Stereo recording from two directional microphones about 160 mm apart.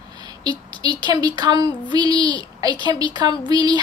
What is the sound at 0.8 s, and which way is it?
Speech, 25° right (ahead or behind).